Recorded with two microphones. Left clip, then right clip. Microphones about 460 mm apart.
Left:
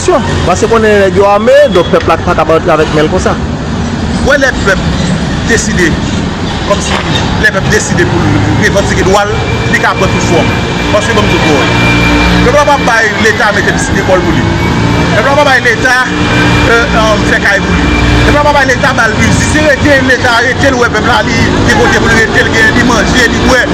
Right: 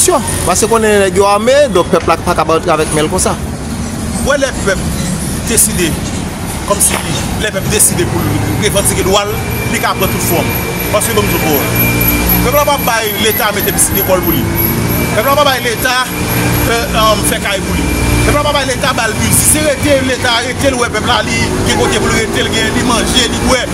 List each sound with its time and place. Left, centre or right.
0.0 s speech: right
12.5 s speech: right
16.7 s speech: right
18.7 s speech: right
20.2 s speech: right
22.8 s speech: right